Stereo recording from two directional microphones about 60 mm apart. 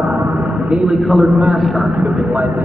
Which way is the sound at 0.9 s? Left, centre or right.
Centre.